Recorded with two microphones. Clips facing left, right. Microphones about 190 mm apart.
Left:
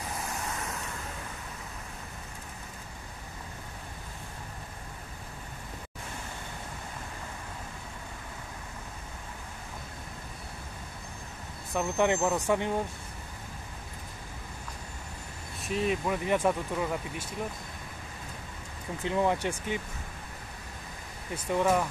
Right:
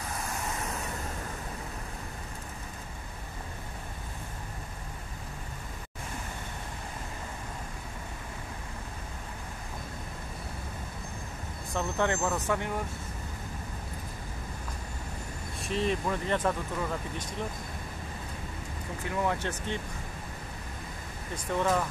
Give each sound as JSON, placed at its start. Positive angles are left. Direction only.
{"t": 11.7, "sound": "speech", "side_deg": 15}
{"t": 15.6, "sound": "speech", "side_deg": 5}
{"t": 19.0, "sound": "speech", "side_deg": 25}
{"t": 19.3, "sound": "speech", "side_deg": 10}
{"t": 21.5, "sound": "speech", "side_deg": 10}